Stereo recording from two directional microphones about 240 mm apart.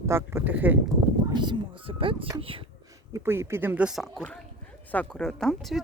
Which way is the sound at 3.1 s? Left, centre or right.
Centre.